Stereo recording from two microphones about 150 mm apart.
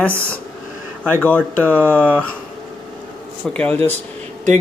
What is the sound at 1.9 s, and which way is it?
Speech, 10° left (ahead or behind).